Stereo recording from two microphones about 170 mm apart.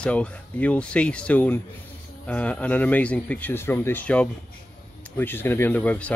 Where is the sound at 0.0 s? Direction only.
5° left (ahead or behind).